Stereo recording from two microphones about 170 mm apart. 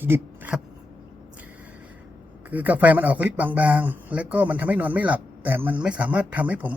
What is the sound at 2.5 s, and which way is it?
Speech, 10° right (ahead or behind).